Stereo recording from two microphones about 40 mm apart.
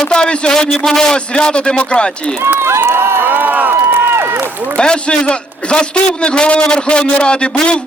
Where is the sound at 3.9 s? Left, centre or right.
Right.